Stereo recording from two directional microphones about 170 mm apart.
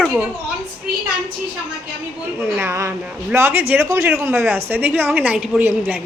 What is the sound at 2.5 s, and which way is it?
A woman's voice, 15° right (ahead or behind).